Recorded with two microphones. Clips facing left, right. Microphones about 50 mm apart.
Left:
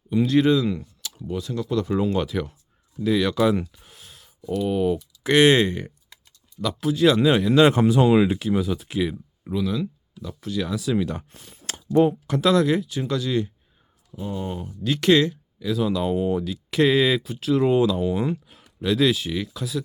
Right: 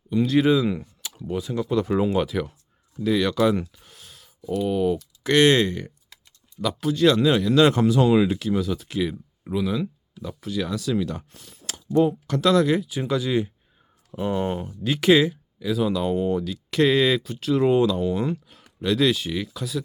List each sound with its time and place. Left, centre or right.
0.2 s speech: centre
0.5 s speech: centre
4.7 s speech: centre
6.6 s speech: centre
9.4 s speech: centre
10.4 s speech: centre
10.8 s speech: centre
12.3 s speech: centre
14.1 s speech: right
14.8 s speech: centre